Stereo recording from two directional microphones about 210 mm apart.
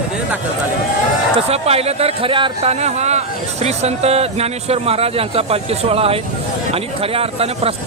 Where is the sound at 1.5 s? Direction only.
30° right (ahead or behind).